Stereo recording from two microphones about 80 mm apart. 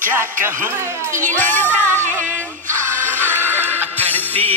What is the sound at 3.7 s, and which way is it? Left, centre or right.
Music, left.